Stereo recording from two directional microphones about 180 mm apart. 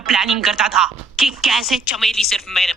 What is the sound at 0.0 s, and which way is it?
Speech, centre (ahead or behind).